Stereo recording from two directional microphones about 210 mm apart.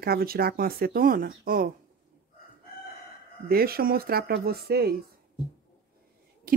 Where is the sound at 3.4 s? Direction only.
45° right (ahead or behind).